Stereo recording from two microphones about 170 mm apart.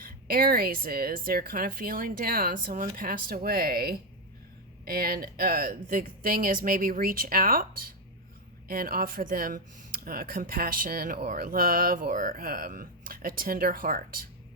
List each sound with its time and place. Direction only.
0.0 s speech: 55° right (ahead or behind)